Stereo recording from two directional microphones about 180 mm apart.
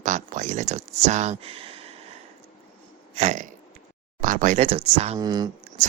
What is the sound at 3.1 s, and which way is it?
Speech, 40° right (ahead or behind).